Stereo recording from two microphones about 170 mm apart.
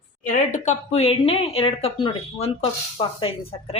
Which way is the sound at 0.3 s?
50° left (ahead or behind).